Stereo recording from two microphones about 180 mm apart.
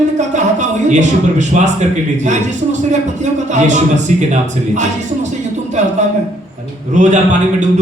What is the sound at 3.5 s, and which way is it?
Speech, 40° right (ahead or behind).